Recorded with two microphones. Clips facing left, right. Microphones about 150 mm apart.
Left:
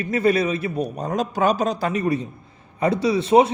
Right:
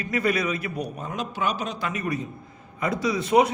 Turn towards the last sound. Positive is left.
turn(degrees=25)  # may be behind; listen again after turning